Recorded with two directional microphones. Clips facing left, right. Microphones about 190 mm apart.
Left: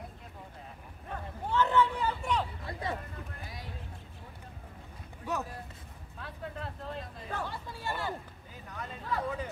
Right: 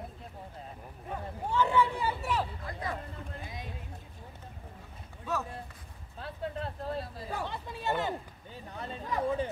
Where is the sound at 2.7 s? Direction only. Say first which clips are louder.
Left 1 dB; 30° left (ahead or behind).